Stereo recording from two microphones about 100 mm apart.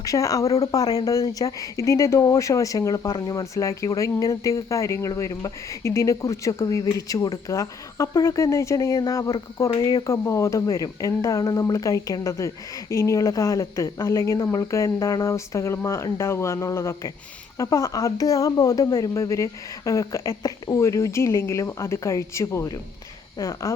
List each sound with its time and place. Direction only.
0.0 s speech: 35° left (ahead or behind)